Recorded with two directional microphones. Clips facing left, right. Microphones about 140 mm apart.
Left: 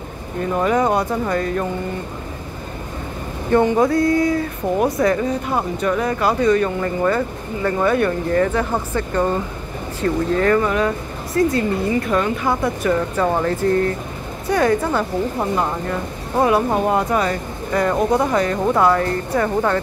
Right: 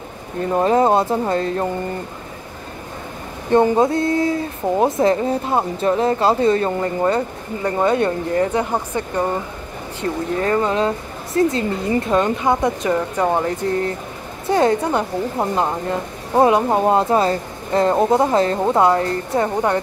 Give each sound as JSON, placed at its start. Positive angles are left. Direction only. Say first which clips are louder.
{"t": 0.6, "sound": "speech", "louder": "right 3 dB", "side_deg": -30}
{"t": 3.7, "sound": "speech", "louder": "left 1 dB", "side_deg": -25}